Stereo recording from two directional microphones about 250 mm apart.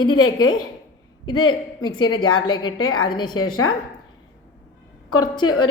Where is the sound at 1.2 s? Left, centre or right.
Centre.